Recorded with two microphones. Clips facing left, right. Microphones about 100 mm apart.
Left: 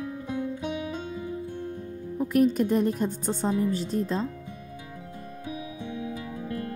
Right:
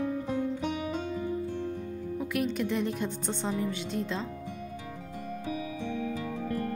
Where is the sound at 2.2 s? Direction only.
40° left (ahead or behind).